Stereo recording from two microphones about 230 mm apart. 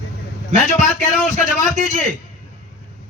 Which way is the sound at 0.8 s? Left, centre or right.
Left.